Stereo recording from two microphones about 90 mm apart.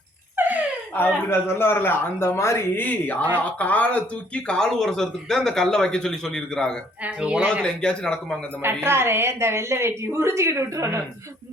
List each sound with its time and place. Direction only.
0.3 s a sound: 20° right (ahead or behind)
0.9 s a man's voice: 25° left (ahead or behind); by 6.7 s 5° left (ahead or behind)
7.0 s speech: 15° right (ahead or behind)
7.6 s a man's voice: 10° left (ahead or behind)
8.6 s a woman's voice: 25° right (ahead or behind)